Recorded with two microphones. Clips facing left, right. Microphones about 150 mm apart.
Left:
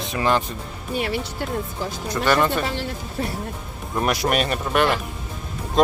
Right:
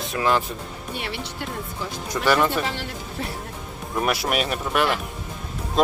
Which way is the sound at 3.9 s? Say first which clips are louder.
Left 2 dB; 5° right (ahead or behind).